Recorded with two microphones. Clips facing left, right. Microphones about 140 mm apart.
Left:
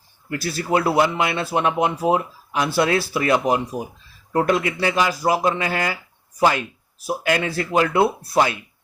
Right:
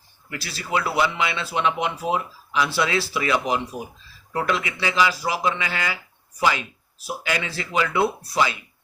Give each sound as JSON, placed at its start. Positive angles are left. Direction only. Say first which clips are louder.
{"t": 0.3, "sound": "speech", "louder": "left 7 dB", "side_deg": 50}